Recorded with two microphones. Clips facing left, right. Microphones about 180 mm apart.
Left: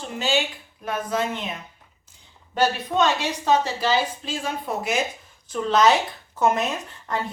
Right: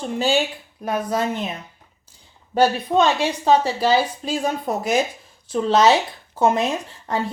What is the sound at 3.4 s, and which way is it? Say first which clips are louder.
Speech: right 4 dB; 35° right (ahead or behind).